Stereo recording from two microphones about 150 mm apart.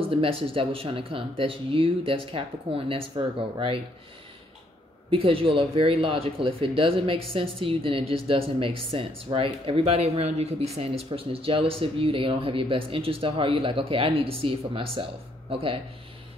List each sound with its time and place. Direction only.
0.0 s speech: 40° right (ahead or behind)
5.1 s speech: 35° right (ahead or behind)